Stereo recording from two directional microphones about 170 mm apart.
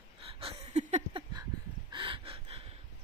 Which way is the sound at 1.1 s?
25° right (ahead or behind).